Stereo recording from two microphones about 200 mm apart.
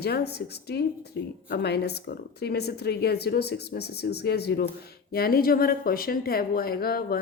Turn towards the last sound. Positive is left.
turn(degrees=50)  # may be behind; listen again after turning